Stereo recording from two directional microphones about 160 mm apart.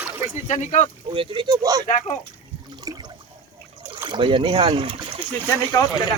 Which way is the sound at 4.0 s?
30° right (ahead or behind).